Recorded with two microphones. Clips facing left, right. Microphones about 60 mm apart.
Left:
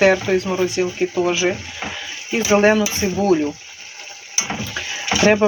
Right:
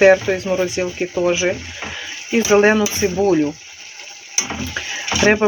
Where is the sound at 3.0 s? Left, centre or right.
Centre.